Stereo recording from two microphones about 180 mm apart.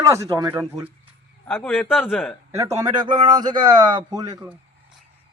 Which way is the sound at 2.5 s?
15° right (ahead or behind).